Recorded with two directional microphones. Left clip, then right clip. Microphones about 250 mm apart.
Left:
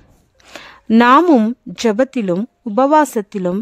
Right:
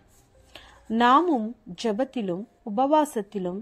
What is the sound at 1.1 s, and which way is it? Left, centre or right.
Speech, left.